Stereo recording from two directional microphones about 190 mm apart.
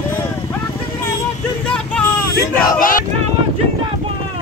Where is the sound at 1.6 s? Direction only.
5° left (ahead or behind).